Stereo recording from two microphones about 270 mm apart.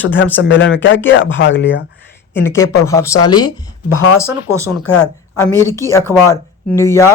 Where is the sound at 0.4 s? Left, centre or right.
Left.